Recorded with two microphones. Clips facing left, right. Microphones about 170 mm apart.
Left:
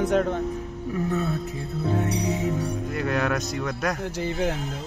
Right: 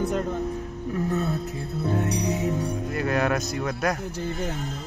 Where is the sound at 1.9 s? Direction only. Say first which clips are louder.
Even; centre (ahead or behind).